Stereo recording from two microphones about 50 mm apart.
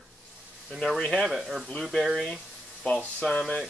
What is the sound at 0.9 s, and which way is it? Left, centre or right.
Speech, centre.